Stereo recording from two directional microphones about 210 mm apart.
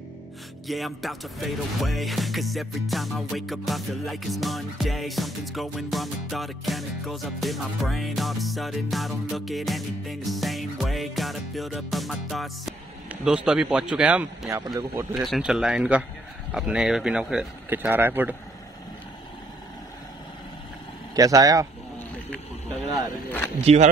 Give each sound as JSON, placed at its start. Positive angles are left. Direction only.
{"t": 0.7, "sound": "a man's voice", "side_deg": 0}
{"t": 15.2, "sound": "speech", "side_deg": 0}
{"t": 21.1, "sound": "speech", "side_deg": -15}
{"t": 23.6, "sound": "speech", "side_deg": -30}